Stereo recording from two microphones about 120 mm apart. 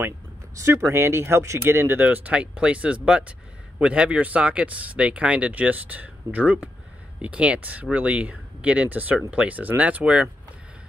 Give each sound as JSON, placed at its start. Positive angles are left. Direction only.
{"t": 0.6, "sound": "speech", "side_deg": -25}